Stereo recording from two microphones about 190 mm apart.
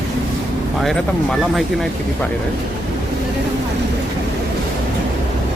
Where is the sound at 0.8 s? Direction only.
Centre (ahead or behind).